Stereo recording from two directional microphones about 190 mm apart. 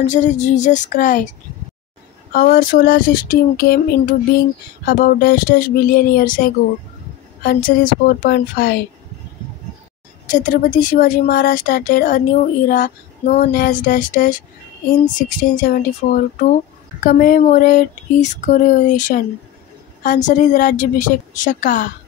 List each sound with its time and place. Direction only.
0.0 s a woman's voice: 40° left (ahead or behind)
2.3 s a woman's voice: 45° left (ahead or behind)
10.2 s a woman's voice: 45° left (ahead or behind)